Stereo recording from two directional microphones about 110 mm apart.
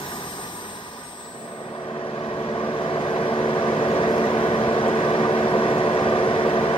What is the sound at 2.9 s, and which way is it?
Vehicle, 55° left (ahead or behind).